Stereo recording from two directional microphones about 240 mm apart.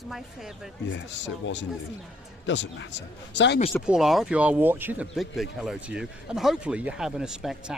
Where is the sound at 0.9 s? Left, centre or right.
Left.